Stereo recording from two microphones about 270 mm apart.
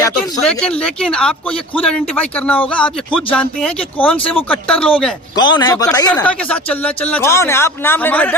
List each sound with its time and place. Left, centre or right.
0.0 s a man's voice: centre
5.4 s speech: centre